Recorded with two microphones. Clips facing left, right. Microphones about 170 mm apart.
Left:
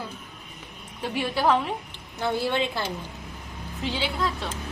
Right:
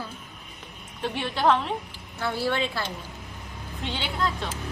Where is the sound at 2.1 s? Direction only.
20° left (ahead or behind).